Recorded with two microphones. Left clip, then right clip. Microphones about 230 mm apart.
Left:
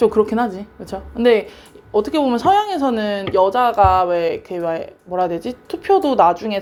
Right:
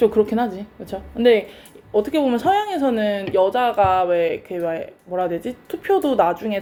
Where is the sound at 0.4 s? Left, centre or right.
Left.